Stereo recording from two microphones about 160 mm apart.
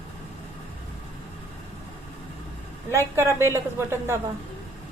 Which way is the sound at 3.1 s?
15° right (ahead or behind).